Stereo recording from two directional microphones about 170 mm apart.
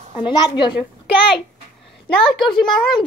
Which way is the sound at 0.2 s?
25° left (ahead or behind).